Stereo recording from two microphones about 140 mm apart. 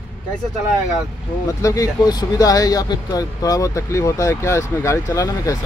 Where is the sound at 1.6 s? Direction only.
25° left (ahead or behind).